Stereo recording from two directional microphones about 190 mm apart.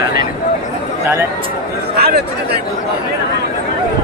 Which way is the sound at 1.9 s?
55° right (ahead or behind).